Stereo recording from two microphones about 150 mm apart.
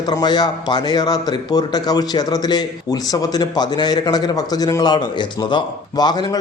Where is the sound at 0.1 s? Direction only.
25° left (ahead or behind).